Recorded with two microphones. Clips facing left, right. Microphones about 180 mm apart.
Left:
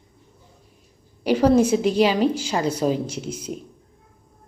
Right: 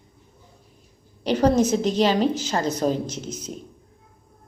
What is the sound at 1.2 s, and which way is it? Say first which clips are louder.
A woman's voice: left 2 dB; 10° left (ahead or behind).